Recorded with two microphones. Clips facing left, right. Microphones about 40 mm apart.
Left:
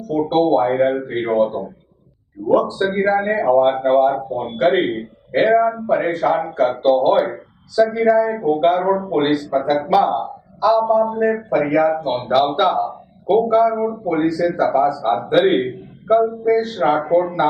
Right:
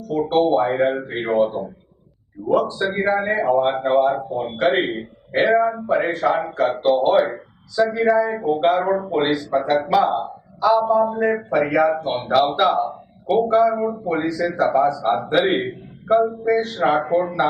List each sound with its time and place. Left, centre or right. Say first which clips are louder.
0.1 s a man's voice: left 2 dB; centre
14.8 s a man's voice: left 1 dB; right
15.1 s a man's voice: left 3 dB; centre
16.6 s a man's voice: left 2 dB; centre